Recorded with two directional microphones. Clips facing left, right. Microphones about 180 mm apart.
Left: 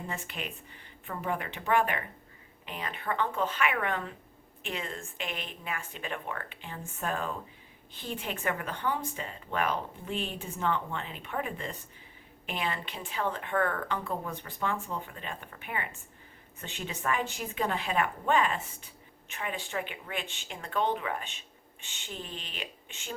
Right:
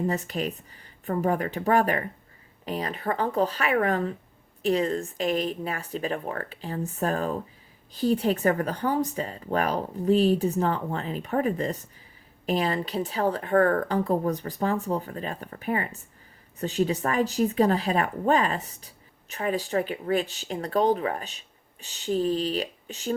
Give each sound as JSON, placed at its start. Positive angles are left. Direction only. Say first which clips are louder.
{"t": 0.1, "sound": "speech", "louder": "right 10 dB", "side_deg": -40}